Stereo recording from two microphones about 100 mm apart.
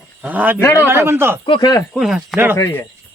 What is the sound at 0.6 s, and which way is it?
Speech, 30° left (ahead or behind).